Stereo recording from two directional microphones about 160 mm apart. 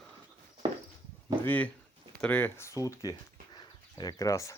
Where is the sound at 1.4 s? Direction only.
10° left (ahead or behind).